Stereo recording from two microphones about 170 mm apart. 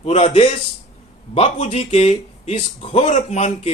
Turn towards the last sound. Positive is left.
turn(degrees=45)  # may be behind; listen again after turning